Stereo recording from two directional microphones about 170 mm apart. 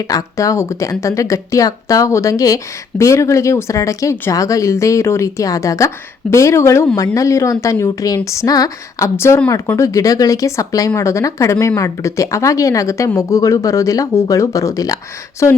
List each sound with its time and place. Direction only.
0.1 s a woman's voice: 20° left (ahead or behind)